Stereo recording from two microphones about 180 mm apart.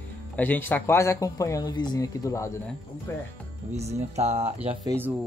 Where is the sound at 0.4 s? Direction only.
10° left (ahead or behind).